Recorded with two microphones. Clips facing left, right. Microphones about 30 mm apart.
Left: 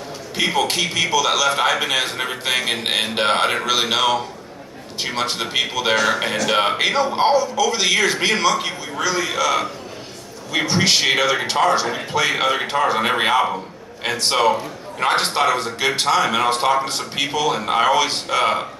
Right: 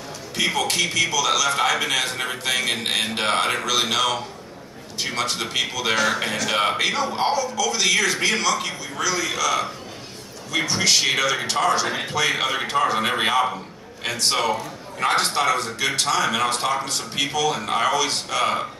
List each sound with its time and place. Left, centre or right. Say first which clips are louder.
0.4 s a man's voice: left 2 dB; left